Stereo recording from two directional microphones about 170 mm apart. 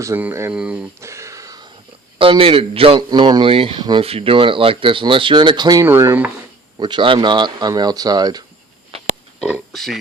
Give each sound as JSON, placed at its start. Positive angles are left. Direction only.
{"t": 0.0, "sound": "speech", "side_deg": -15}
{"t": 0.5, "sound": "a sound", "side_deg": -5}
{"t": 2.1, "sound": "speech", "side_deg": -30}
{"t": 6.7, "sound": "speech", "side_deg": -25}
{"t": 9.4, "sound": "speech", "side_deg": 0}